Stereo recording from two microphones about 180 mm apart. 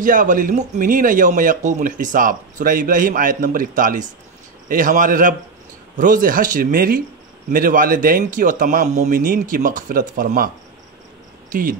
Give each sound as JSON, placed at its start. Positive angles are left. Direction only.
{"t": 0.0, "sound": "a man's voice", "side_deg": -45}